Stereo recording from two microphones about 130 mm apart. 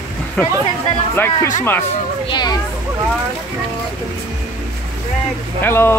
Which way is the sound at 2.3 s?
30° left (ahead or behind).